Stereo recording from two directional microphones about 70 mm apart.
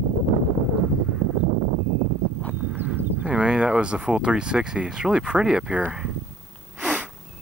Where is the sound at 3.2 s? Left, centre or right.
Centre.